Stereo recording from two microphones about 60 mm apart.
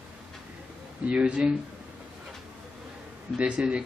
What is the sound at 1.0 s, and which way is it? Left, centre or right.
Speech, centre.